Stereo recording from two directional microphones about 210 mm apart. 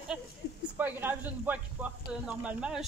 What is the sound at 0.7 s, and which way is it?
Speech, 10° right (ahead or behind).